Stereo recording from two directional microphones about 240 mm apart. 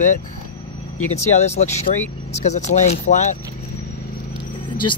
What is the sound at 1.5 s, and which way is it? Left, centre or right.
Speech, left.